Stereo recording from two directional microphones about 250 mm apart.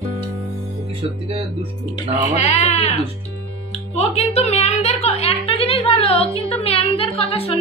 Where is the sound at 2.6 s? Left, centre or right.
Left.